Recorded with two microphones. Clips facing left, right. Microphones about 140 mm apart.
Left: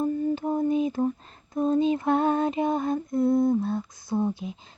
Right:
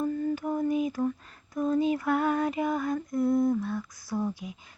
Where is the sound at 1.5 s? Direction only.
25° left (ahead or behind).